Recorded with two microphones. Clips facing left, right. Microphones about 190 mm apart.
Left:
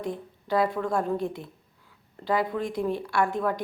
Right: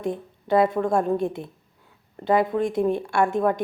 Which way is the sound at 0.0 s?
25° right (ahead or behind).